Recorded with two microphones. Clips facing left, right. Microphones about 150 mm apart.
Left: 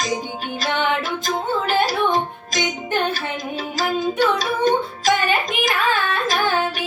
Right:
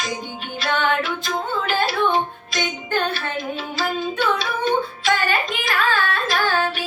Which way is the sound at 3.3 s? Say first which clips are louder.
Even; 40° left (ahead or behind).